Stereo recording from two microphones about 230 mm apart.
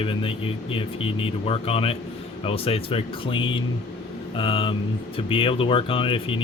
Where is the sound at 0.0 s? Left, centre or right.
Left.